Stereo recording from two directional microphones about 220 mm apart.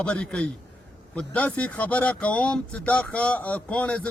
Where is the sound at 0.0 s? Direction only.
5° left (ahead or behind).